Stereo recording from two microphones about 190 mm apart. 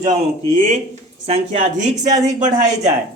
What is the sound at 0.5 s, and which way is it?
Speech, 35° right (ahead or behind).